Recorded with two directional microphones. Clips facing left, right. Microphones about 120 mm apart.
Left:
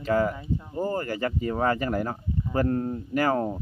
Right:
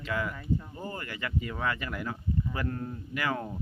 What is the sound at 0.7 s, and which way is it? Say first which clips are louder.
Speech: left 11 dB; 40° left (ahead or behind).